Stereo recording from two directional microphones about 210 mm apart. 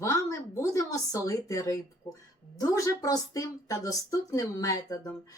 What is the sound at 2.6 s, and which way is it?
A woman's voice, 15° left (ahead or behind).